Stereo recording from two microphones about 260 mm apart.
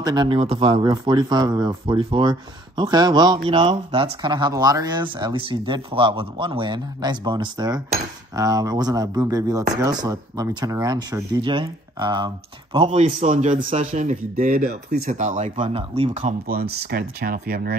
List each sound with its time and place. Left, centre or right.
0.0 s a man's voice: centre; by 17.7 s right